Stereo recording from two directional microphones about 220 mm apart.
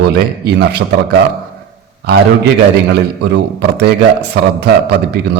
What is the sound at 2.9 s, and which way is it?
A man's voice, 50° right (ahead or behind).